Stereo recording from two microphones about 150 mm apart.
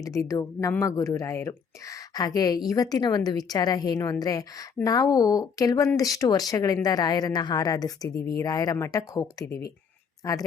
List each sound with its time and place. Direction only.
0.0 s a woman's voice: 20° left (ahead or behind)
9.5 s speech: 90° left